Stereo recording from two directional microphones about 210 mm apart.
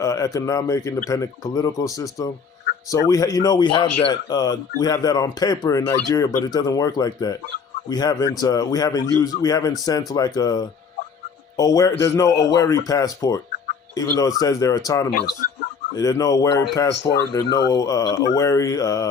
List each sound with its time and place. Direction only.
0.0 s a man's voice: 15° left (ahead or behind)